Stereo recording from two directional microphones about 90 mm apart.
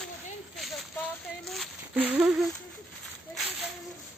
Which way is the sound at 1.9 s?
15° right (ahead or behind).